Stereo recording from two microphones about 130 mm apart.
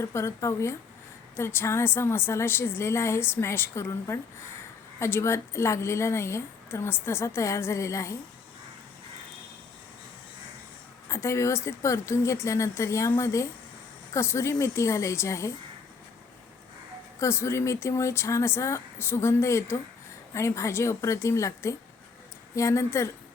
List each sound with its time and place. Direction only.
0.0 s a woman's voice: 20° left (ahead or behind)
11.1 s a woman's voice: 20° left (ahead or behind)
17.2 s a woman's voice: 20° left (ahead or behind)